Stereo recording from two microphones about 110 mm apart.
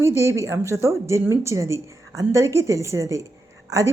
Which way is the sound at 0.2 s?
25° right (ahead or behind).